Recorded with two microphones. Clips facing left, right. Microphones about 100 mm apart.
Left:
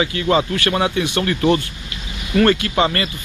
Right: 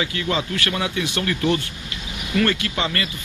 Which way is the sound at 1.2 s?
40° left (ahead or behind).